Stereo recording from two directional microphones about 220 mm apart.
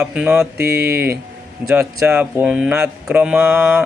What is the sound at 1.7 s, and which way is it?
Speech, 10° right (ahead or behind).